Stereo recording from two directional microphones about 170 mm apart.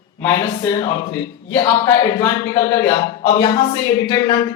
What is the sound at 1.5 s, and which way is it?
A man's voice, 20° left (ahead or behind).